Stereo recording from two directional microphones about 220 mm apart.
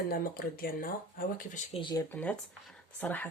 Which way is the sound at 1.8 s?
20° left (ahead or behind).